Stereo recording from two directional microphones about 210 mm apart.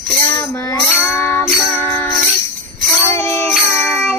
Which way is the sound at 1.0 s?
10° left (ahead or behind).